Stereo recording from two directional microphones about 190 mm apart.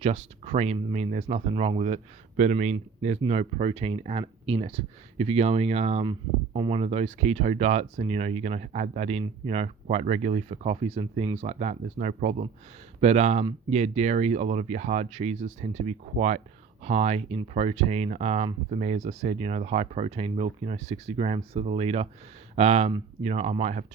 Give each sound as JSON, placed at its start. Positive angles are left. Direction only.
{"t": 0.0, "sound": "speech", "side_deg": -35}